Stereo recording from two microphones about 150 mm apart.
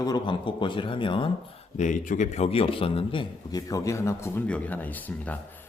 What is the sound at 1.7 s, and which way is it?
Speech, 55° left (ahead or behind).